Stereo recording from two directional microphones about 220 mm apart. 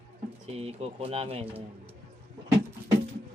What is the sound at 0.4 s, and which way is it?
Speech, 30° right (ahead or behind).